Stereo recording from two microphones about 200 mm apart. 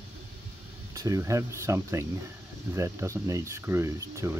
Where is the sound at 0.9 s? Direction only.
15° right (ahead or behind).